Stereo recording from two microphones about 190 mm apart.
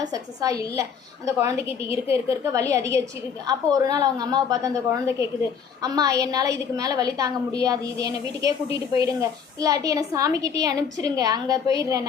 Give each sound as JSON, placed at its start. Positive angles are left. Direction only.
{"t": 0.0, "sound": "a woman's voice", "side_deg": -20}